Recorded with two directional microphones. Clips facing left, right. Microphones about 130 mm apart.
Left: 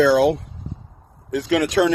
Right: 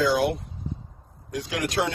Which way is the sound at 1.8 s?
90° left.